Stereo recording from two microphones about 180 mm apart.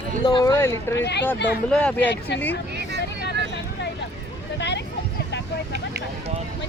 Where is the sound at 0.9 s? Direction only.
75° left (ahead or behind).